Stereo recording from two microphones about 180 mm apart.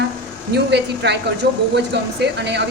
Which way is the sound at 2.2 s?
70° right (ahead or behind).